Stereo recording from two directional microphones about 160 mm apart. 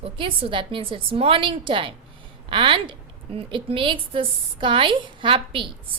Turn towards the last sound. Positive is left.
turn(degrees=-30)  # may be behind; listen again after turning